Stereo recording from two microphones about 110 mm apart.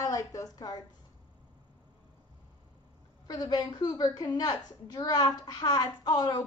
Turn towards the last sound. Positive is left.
turn(degrees=35)  # may be behind; listen again after turning